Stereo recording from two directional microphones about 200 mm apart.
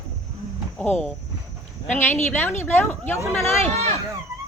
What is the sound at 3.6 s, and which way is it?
Speech, 30° right (ahead or behind).